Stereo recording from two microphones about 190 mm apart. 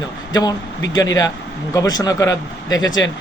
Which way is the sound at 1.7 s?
20° left (ahead or behind).